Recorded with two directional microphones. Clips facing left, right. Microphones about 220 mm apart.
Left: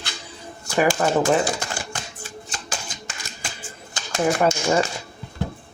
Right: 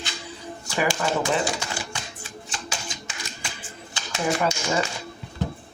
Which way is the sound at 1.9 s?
45° left (ahead or behind).